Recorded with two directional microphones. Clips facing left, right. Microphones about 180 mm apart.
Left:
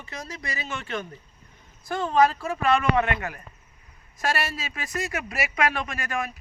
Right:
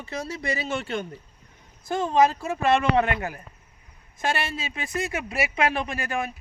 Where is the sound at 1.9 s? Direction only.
20° right (ahead or behind).